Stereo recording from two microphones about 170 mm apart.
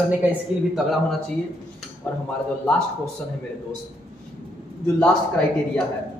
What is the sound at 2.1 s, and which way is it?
Speech, 10° left (ahead or behind).